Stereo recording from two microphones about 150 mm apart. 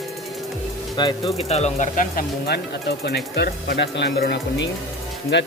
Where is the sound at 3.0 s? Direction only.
90° left.